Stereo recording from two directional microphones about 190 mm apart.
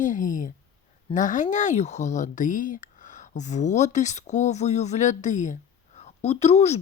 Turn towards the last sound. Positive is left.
turn(degrees=35)  # may be behind; listen again after turning